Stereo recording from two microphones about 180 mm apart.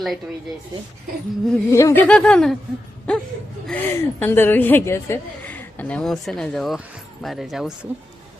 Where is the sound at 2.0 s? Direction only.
5° left (ahead or behind).